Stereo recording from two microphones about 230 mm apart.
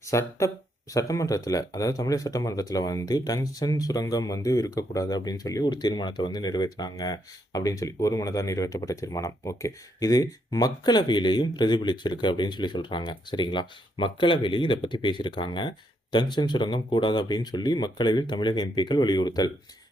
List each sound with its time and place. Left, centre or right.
0.0 s speech: centre